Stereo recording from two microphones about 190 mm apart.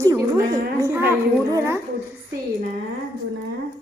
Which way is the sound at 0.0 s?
15° right (ahead or behind).